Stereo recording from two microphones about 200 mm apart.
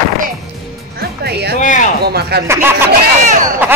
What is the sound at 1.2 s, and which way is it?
Speech, 55° right (ahead or behind).